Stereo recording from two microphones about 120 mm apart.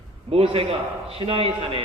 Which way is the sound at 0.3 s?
55° right (ahead or behind).